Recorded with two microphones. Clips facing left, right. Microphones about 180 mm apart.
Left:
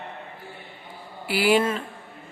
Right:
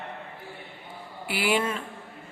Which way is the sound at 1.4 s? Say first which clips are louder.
Left 5 dB; 35° left (ahead or behind).